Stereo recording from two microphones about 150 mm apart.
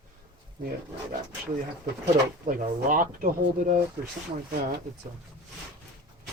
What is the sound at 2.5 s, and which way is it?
A woman's voice, 65° right (ahead or behind).